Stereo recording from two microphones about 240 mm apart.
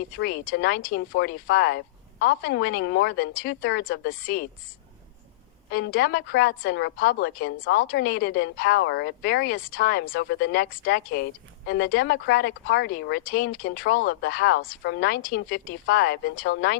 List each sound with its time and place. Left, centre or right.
0.2 s a woman's voice: left
5.7 s a woman's voice: left